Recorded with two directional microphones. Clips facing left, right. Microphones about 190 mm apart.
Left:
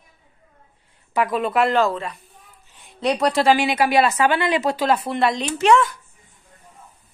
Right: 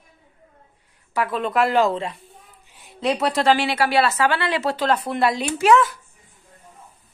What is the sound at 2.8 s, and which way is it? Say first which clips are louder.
Speech: left 2 dB; centre (ahead or behind).